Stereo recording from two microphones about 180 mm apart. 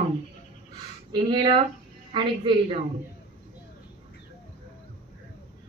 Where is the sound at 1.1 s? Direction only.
25° right (ahead or behind).